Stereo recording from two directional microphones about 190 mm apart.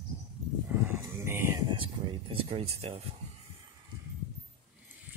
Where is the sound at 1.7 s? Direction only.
25° right (ahead or behind).